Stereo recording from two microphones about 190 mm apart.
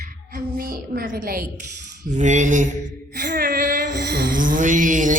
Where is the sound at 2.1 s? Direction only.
40° right (ahead or behind).